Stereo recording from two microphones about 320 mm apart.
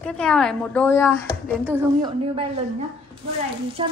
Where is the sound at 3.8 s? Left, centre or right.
Centre.